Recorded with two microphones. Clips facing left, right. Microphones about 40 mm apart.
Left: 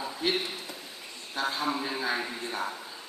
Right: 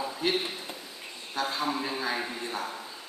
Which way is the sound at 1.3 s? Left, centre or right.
Left.